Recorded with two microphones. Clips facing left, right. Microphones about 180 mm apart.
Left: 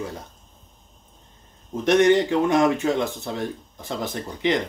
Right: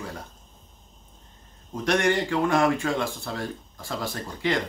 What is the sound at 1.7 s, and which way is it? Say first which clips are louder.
Speech: left 6 dB; 20° left (ahead or behind).